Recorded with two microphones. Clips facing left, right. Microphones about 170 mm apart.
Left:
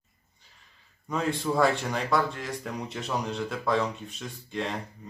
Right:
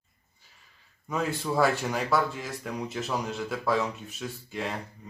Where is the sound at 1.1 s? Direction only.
5° right (ahead or behind).